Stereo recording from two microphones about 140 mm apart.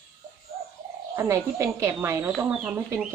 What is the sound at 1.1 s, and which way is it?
Speech, 20° right (ahead or behind).